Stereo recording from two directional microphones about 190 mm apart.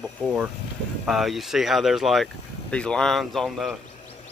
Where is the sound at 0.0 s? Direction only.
5° right (ahead or behind).